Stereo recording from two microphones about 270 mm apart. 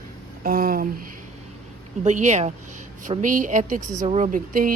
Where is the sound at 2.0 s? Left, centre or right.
Right.